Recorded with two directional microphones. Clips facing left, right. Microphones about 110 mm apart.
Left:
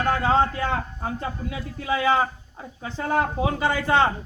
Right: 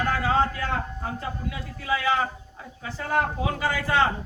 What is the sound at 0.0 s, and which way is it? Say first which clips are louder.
A man's voice: left 3 dB; 25° left (ahead or behind).